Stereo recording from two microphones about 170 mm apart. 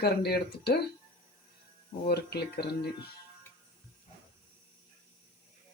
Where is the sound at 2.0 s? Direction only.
70° left (ahead or behind).